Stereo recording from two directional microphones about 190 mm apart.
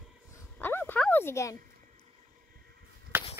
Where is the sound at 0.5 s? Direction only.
10° left (ahead or behind).